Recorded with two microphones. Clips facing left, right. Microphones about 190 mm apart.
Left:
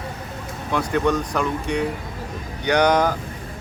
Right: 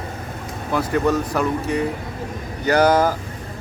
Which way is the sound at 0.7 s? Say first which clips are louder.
Right 1 dB; 5° right (ahead or behind).